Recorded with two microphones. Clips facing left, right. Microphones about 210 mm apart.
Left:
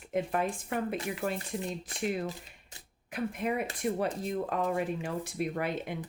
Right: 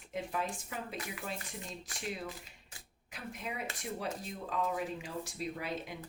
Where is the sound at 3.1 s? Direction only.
55° left (ahead or behind).